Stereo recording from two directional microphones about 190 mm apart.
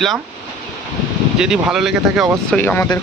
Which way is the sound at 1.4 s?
5° right (ahead or behind).